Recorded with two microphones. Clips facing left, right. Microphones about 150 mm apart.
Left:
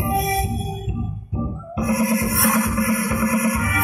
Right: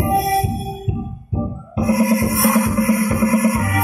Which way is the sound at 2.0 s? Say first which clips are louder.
Right 4 dB; 25° right (ahead or behind).